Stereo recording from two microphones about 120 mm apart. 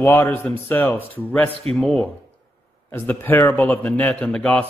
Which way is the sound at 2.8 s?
15° left (ahead or behind).